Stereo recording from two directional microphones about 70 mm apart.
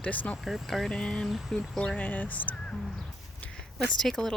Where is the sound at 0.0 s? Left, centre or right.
Left.